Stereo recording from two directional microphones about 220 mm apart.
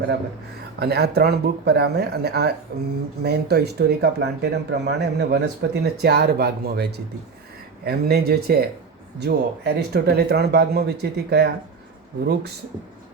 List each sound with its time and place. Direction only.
0.8 s speech: 45° right (ahead or behind)